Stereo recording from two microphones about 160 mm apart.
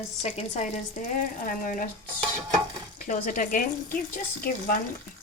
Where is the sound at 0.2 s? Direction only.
40° left (ahead or behind).